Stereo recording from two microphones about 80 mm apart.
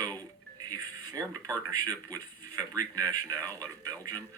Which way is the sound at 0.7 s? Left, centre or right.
Right.